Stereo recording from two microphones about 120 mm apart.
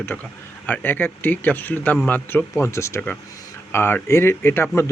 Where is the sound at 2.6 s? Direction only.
25° left (ahead or behind).